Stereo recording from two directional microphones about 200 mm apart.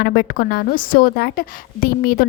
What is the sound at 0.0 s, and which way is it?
A woman's voice, 50° left (ahead or behind).